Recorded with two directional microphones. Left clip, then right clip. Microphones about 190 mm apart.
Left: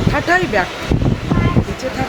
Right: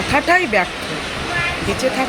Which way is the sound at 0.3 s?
5° left (ahead or behind).